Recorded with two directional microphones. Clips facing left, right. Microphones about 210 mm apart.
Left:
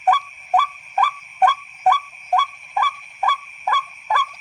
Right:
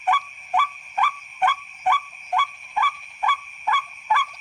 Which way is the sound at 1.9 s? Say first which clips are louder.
Left 5 dB; 40° left (ahead or behind).